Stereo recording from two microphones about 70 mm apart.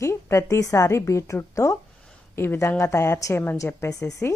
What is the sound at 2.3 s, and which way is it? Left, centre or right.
A woman's voice, left.